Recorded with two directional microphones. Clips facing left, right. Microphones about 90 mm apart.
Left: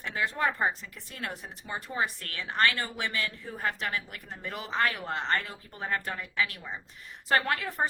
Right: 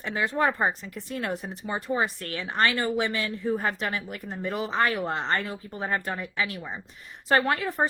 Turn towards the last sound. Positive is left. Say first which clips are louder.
# right 4 dB
turn(degrees=-25)  # may be behind; listen again after turning